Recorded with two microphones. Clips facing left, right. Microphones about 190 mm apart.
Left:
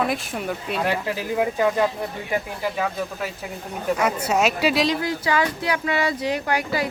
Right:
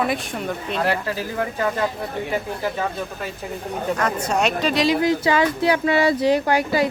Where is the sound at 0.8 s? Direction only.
15° left (ahead or behind).